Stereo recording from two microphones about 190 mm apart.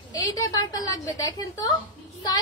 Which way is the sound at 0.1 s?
20° left (ahead or behind).